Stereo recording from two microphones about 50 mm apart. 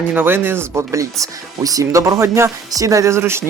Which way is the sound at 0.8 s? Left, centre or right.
Right.